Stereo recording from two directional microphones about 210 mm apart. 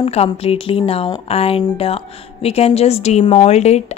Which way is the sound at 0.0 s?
30° left (ahead or behind).